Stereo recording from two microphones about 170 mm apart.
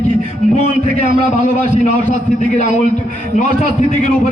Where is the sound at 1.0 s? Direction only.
45° left (ahead or behind).